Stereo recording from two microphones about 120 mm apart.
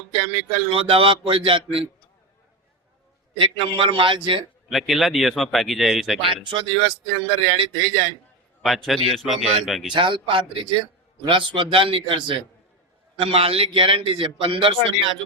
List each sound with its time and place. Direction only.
0.2 s a man's voice: 50° right (ahead or behind)
3.3 s a man's voice: 45° right (ahead or behind)
4.7 s speech: centre (ahead or behind)
6.2 s a man's voice: 45° right (ahead or behind)
8.6 s speech: centre (ahead or behind)
9.9 s a man's voice: 40° right (ahead or behind)